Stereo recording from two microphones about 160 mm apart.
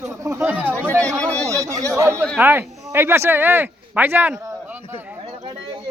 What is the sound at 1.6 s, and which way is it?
A man's voice, 20° right (ahead or behind).